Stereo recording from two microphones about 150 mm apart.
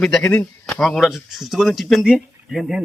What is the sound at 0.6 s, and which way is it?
Speech, centre (ahead or behind).